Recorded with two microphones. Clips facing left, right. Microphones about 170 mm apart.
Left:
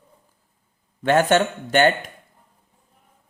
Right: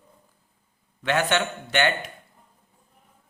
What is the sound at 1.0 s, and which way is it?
A man's voice, 45° left (ahead or behind).